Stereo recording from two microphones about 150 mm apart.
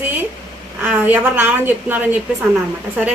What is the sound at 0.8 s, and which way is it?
A woman's voice, 10° right (ahead or behind).